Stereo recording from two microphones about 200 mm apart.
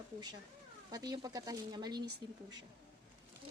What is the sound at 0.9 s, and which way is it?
Speech, 20° right (ahead or behind).